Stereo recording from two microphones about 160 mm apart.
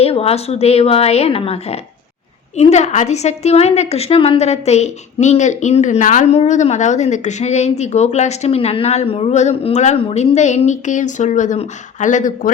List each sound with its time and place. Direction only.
0.0 s a woman's voice: 40° left (ahead or behind)